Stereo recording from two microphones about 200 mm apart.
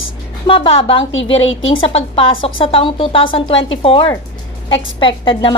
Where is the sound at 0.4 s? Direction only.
25° left (ahead or behind).